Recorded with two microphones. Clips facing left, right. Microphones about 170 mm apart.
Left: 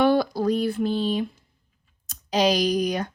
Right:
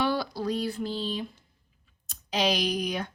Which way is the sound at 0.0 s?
50° left (ahead or behind).